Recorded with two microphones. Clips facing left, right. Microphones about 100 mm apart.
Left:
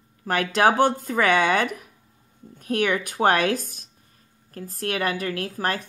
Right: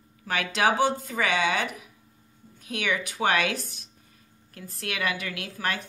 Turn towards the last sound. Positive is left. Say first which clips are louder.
# left 5 dB
turn(degrees=40)  # may be behind; listen again after turning